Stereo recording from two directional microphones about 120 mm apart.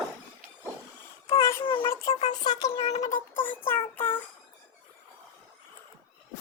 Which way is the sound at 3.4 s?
15° left (ahead or behind).